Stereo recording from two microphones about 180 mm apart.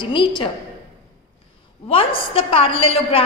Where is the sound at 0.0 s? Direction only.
25° left (ahead or behind).